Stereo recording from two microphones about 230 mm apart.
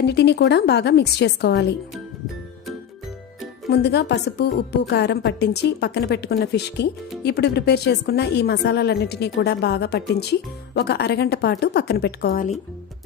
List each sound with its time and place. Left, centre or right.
0.0 s a woman's voice: left
3.7 s a woman's voice: left